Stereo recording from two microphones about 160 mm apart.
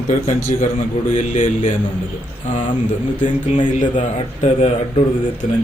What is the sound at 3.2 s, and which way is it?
A man's voice, 50° left (ahead or behind).